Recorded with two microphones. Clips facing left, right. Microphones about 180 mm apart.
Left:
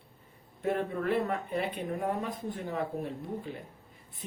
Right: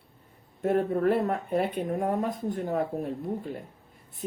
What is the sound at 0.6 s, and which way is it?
Speech, 45° right (ahead or behind).